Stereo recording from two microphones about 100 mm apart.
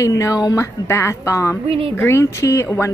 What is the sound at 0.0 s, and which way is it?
A woman's voice, 35° left (ahead or behind).